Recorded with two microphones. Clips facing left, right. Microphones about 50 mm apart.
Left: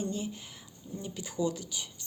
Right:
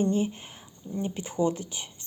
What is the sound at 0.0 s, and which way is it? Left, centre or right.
Speech, right.